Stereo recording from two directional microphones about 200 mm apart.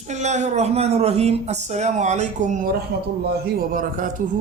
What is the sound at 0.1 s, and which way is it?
Speech, 35° right (ahead or behind).